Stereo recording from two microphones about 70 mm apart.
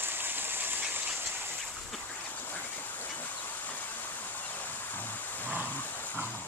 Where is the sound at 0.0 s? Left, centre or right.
Right.